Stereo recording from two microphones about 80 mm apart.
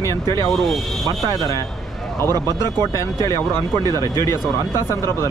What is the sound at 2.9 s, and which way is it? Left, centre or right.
Speech, left.